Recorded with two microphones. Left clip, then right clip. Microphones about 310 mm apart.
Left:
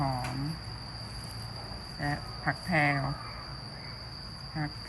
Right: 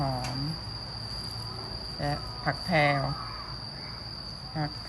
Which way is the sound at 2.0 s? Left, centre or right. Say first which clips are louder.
Right 1 dB; centre.